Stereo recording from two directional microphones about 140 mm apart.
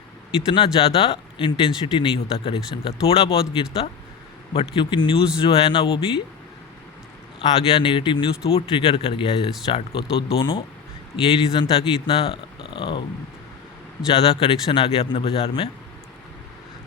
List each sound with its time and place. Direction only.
0.3 s speech: 40° left (ahead or behind)
7.7 s speech: 40° left (ahead or behind)
14.1 s speech: 45° left (ahead or behind)